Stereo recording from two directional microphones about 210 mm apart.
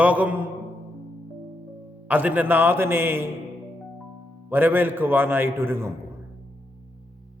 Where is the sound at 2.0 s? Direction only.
10° right (ahead or behind).